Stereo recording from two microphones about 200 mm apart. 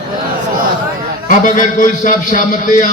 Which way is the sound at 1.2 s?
40° left (ahead or behind).